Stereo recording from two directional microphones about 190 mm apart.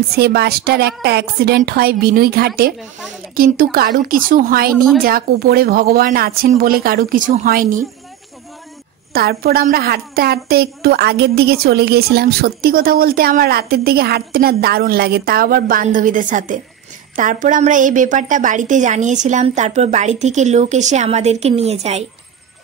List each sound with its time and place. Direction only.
0.1 s a woman's voice: 55° right (ahead or behind)
4.7 s a woman's voice: centre (ahead or behind)
5.0 s a woman's voice: 50° right (ahead or behind)
9.1 s a woman's voice: 55° right (ahead or behind); by 22.0 s 35° right (ahead or behind)